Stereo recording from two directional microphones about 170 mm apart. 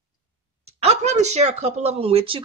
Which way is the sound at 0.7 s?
40° right (ahead or behind).